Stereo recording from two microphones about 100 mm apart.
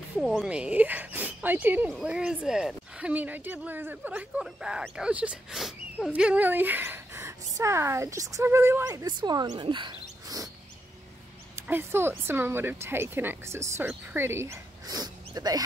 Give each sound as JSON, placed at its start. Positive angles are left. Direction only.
{"t": 0.2, "sound": "speech", "side_deg": -5}
{"t": 2.0, "sound": "speech", "side_deg": -10}
{"t": 8.8, "sound": "speech", "side_deg": -40}
{"t": 11.6, "sound": "speech", "side_deg": -20}
{"t": 15.0, "sound": "a sound", "side_deg": -40}